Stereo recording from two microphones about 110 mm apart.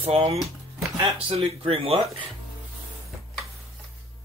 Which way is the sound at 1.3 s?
60° right (ahead or behind).